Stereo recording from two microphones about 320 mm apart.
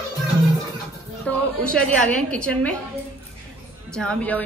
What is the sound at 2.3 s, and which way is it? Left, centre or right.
Speech, centre.